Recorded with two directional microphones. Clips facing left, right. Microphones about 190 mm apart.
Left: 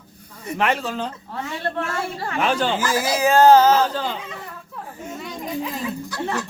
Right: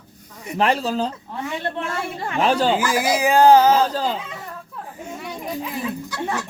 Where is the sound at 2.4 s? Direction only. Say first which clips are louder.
Right 3 dB; 35° right (ahead or behind).